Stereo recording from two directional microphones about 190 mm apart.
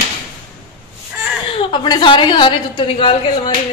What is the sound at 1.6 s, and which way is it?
A woman's voice, 25° left (ahead or behind).